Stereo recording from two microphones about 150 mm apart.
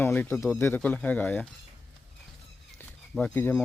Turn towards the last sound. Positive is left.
turn(degrees=10)  # may be behind; listen again after turning